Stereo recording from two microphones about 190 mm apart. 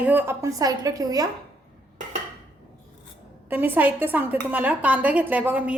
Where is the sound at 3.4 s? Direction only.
10° right (ahead or behind).